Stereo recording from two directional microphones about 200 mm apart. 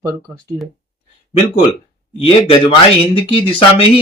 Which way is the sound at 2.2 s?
30° left (ahead or behind).